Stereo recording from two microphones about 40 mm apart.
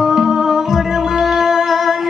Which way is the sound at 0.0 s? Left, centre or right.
Centre.